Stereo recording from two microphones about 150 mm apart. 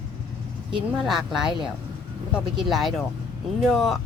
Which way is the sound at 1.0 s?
5° right (ahead or behind).